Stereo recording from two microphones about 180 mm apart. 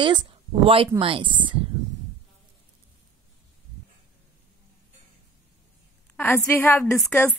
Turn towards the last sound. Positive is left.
turn(degrees=15)  # may be behind; listen again after turning